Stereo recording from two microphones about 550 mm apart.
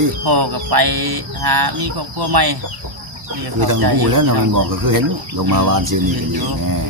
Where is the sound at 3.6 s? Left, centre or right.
Right.